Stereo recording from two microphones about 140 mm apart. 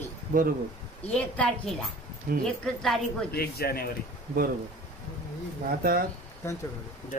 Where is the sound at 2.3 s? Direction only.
90° right.